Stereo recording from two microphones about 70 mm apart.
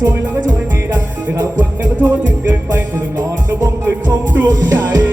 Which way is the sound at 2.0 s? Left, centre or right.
Right.